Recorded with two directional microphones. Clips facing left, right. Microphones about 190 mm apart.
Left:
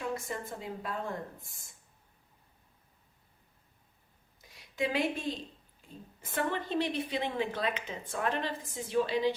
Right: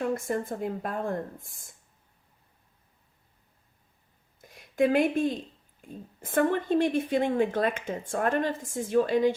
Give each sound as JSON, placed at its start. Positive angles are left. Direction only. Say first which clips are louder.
{"t": 0.0, "sound": "speech", "louder": "right 8 dB", "side_deg": -50}
{"t": 4.4, "sound": "a sound", "louder": "right 9 dB", "side_deg": -50}
{"t": 5.8, "sound": "speech", "louder": "right 7 dB", "side_deg": -50}